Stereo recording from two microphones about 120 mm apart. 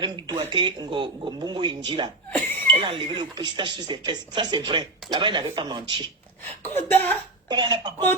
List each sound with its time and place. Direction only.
0.0 s speech: 35° right (ahead or behind)
6.7 s speech: 15° left (ahead or behind)
7.4 s speech: 35° right (ahead or behind)